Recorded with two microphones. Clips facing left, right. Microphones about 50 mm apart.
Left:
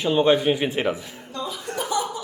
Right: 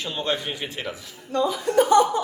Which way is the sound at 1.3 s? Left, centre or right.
Right.